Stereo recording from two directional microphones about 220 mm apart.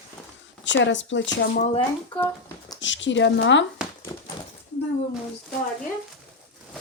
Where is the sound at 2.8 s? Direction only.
55° left (ahead or behind).